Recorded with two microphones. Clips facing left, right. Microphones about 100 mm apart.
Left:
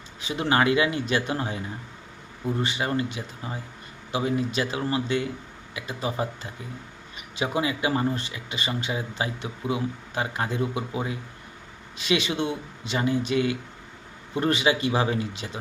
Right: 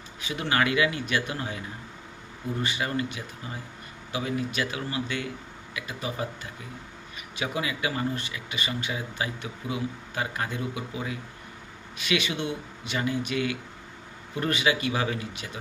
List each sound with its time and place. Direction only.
0.2 s speech: 30° left (ahead or behind)